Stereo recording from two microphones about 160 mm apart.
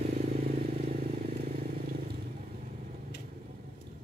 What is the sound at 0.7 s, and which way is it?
Vehicle, 70° right (ahead or behind).